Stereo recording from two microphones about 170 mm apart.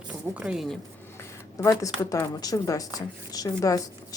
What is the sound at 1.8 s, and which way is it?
Speech, 20° left (ahead or behind).